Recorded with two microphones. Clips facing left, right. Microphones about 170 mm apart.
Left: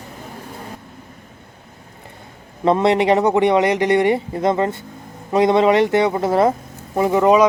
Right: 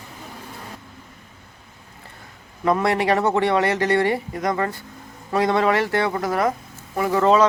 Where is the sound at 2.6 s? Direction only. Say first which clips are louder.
Left 5 dB; 25° left (ahead or behind).